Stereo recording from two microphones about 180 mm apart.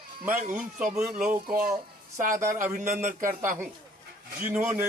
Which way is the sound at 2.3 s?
15° right (ahead or behind).